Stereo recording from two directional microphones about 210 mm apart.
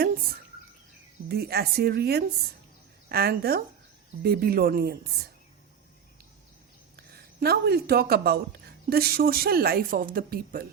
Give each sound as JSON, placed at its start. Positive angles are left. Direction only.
{"t": 1.3, "sound": "speech", "side_deg": -50}
{"t": 6.9, "sound": "speech", "side_deg": -50}